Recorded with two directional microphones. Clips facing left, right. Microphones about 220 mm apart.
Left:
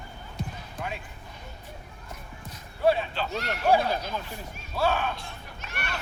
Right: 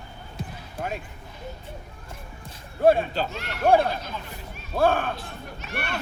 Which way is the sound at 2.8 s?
50° right (ahead or behind).